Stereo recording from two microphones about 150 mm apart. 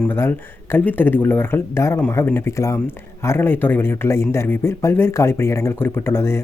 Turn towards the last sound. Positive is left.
turn(degrees=15)  # may be behind; listen again after turning